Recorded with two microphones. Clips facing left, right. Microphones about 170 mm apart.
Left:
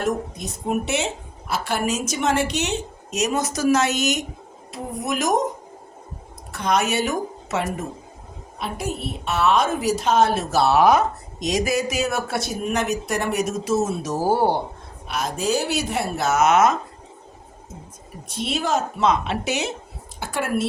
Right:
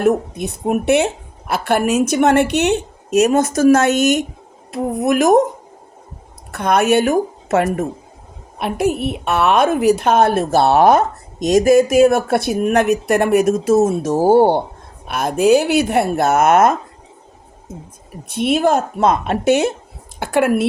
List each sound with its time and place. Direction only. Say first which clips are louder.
0.0 s a woman's voice: right 8 dB; 60° right (ahead or behind)
6.5 s a woman's voice: right 7 dB; 60° right (ahead or behind)
18.3 s a woman's voice: right 9 dB; 60° right (ahead or behind)